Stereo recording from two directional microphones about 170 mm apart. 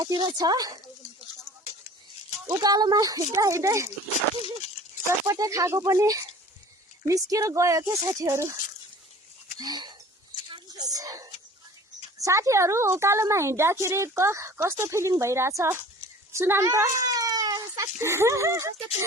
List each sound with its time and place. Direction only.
0.0 s speech: 25° right (ahead or behind)
2.5 s speech: 20° right (ahead or behind)
5.0 s a woman's voice: 20° right (ahead or behind)
9.6 s speech: 25° right (ahead or behind)
10.5 s a sound: 20° right (ahead or behind)
12.1 s a woman's voice: 20° right (ahead or behind)
17.0 s a sound: 20° right (ahead or behind)